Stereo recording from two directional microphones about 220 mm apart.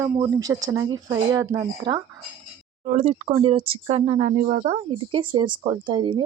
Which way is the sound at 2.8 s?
35° right (ahead or behind).